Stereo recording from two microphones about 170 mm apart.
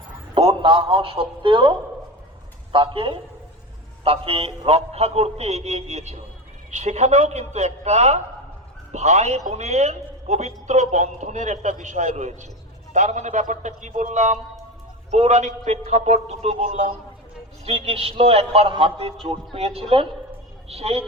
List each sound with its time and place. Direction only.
0.3 s a man's voice: 30° right (ahead or behind)
2.7 s a man's voice: 30° right (ahead or behind)